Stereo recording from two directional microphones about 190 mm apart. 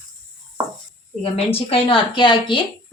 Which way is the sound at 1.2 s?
30° left (ahead or behind).